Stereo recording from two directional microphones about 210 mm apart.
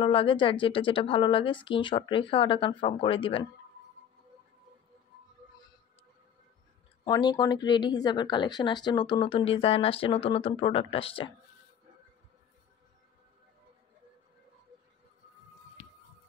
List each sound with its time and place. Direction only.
0.0 s speech: 25° left (ahead or behind)
7.1 s speech: 20° left (ahead or behind)